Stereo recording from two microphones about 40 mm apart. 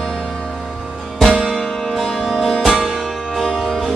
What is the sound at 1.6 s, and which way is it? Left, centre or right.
Music, centre.